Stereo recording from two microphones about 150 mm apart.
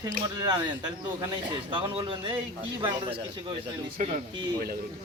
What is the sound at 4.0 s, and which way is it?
Speech, 65° right (ahead or behind).